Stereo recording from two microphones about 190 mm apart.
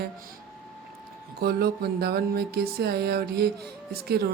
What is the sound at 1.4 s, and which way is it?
Speech, 55° right (ahead or behind).